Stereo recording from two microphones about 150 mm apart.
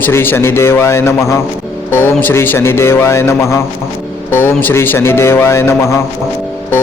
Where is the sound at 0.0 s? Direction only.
15° left (ahead or behind).